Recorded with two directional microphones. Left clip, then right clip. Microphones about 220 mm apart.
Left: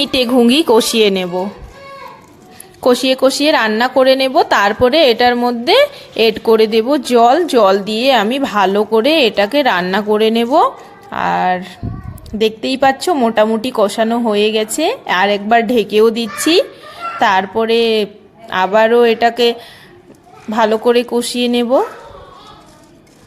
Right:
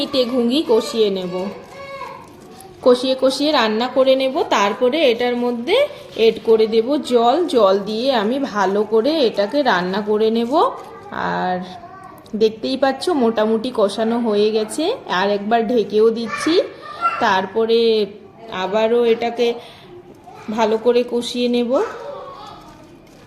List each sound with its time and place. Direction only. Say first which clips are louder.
0.0 s speech: left 6 dB; 45° left (ahead or behind)
2.8 s a woman's voice: left 3 dB; 35° left (ahead or behind)
17.2 s speech: left 7 dB; 35° left (ahead or behind)